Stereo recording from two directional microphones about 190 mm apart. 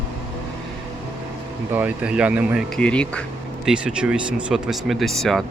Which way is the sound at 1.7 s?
5° right (ahead or behind).